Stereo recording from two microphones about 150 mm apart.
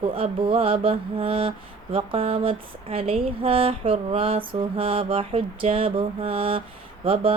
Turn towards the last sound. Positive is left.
turn(degrees=-35)  # may be behind; listen again after turning